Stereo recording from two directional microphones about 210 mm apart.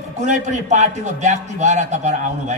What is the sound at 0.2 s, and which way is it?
A woman's voice, 35° right (ahead or behind).